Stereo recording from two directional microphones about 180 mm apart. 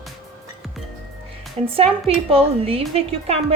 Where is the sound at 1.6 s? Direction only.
35° right (ahead or behind).